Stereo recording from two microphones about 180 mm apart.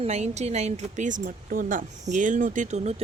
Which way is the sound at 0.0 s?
35° right (ahead or behind).